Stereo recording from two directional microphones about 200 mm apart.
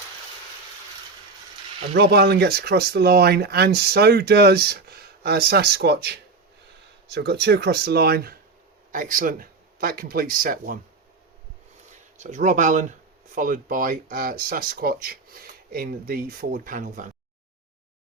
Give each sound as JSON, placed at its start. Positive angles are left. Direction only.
{"t": 1.9, "sound": "speech", "side_deg": -55}
{"t": 12.1, "sound": "speech", "side_deg": -35}